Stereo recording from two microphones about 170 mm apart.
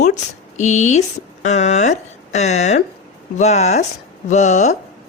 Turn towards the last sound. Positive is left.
turn(degrees=40)  # may be behind; listen again after turning